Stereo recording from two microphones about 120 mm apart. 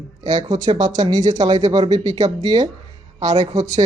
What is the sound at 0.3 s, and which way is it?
A woman's voice, 40° right (ahead or behind).